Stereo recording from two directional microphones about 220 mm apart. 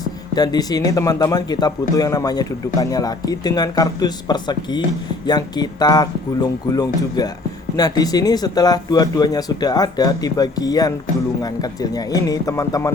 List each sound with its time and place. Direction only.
0.0 s a man's voice: 20° left (ahead or behind)